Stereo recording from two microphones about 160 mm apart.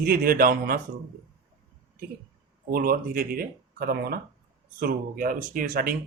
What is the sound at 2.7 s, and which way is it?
Speech, 65° right (ahead or behind).